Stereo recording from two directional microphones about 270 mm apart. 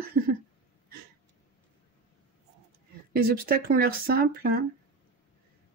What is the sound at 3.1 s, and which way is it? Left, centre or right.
Speech, right.